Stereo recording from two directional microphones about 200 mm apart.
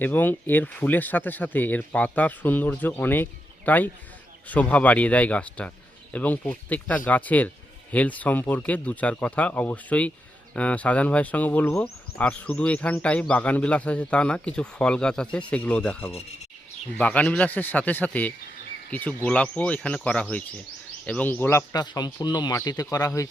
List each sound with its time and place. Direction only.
0.0 s speech: 10° left (ahead or behind)